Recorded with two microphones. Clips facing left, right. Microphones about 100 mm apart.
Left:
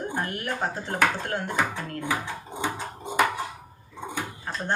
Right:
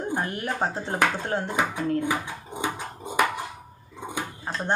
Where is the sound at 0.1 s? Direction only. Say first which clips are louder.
Right 2 dB; 20° right (ahead or behind).